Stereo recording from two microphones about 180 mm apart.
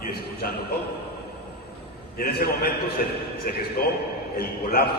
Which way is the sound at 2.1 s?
55° left (ahead or behind).